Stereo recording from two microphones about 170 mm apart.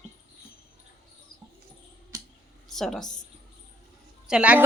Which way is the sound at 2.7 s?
Centre (ahead or behind).